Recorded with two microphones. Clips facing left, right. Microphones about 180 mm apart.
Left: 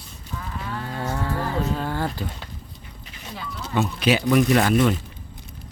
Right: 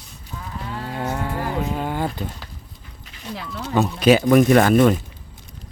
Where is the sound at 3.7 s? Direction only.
40° right (ahead or behind).